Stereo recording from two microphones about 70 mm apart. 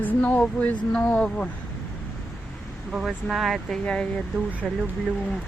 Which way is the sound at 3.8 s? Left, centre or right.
Centre.